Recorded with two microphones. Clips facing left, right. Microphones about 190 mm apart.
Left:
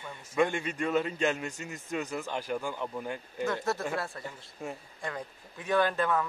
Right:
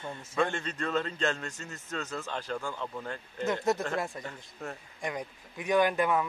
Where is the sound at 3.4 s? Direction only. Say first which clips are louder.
Right 2 dB; 20° right (ahead or behind).